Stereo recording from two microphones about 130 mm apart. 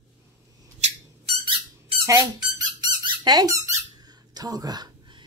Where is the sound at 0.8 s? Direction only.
65° right (ahead or behind).